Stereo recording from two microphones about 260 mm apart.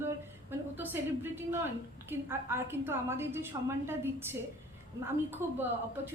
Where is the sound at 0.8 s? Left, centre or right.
Centre.